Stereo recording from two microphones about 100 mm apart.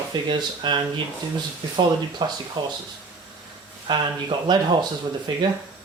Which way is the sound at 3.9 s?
50° right (ahead or behind).